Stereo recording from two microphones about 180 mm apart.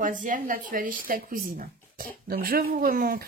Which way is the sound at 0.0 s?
45° right (ahead or behind).